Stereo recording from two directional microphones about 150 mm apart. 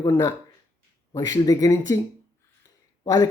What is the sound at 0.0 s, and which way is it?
Speech, 25° left (ahead or behind).